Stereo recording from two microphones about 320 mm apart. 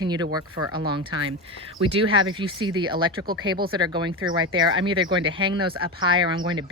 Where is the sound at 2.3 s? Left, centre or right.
Centre.